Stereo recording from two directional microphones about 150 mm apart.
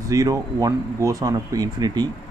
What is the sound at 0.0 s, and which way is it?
Speech, 20° right (ahead or behind).